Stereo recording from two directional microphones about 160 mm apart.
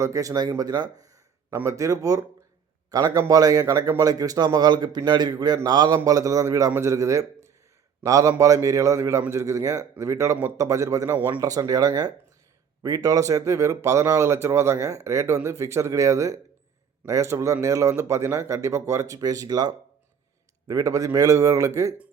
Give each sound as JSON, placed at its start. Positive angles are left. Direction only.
{"t": 0.0, "sound": "a man's voice", "side_deg": -20}